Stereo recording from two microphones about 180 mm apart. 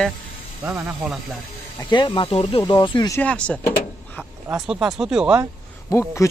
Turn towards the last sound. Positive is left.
turn(degrees=15)  # may be behind; listen again after turning